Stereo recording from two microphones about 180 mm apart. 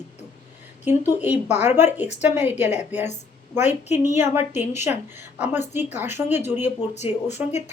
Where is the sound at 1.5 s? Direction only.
40° left (ahead or behind).